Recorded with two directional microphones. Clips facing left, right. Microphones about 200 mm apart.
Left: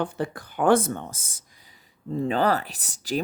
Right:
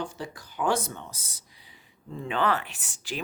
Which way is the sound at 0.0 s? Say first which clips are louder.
Left 7 dB; 55° left (ahead or behind).